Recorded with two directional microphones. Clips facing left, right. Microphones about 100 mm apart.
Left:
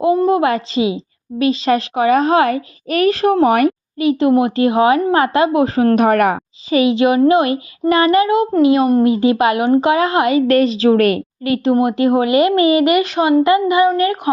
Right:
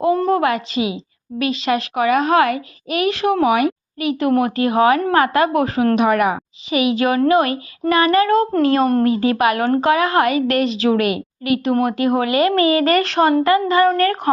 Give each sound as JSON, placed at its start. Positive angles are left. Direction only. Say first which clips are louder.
{"t": 0.0, "sound": "a sound", "louder": "left 3 dB", "side_deg": 15}
{"t": 0.4, "sound": "a child's voice", "louder": "left 3 dB", "side_deg": 30}
{"t": 2.9, "sound": "a woman's voice", "louder": "left 4 dB", "side_deg": 40}
{"t": 4.0, "sound": "a child's voice", "louder": "left 4 dB", "side_deg": 30}
{"t": 6.7, "sound": "a child's voice", "louder": "left 4 dB", "side_deg": 30}
{"t": 9.0, "sound": "a child's voice", "louder": "left 3 dB", "side_deg": 20}
{"t": 10.4, "sound": "a woman's voice", "louder": "left 5 dB", "side_deg": 35}
{"t": 11.4, "sound": "a woman's voice", "louder": "left 2 dB", "side_deg": 30}
{"t": 11.7, "sound": "a child's voice", "louder": "left 5 dB", "side_deg": 20}
{"t": 13.4, "sound": "speech", "louder": "left 2 dB", "side_deg": 20}